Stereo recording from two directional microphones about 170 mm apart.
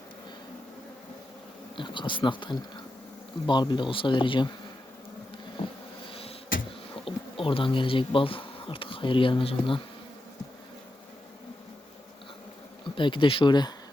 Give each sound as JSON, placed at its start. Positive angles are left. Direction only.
{"t": 1.7, "sound": "speech", "side_deg": 30}
{"t": 6.1, "sound": "a sound", "side_deg": 35}
{"t": 7.0, "sound": "speech", "side_deg": 30}
{"t": 12.8, "sound": "speech", "side_deg": 30}